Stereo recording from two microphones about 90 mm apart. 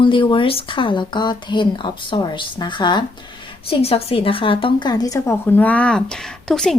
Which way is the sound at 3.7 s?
90° left.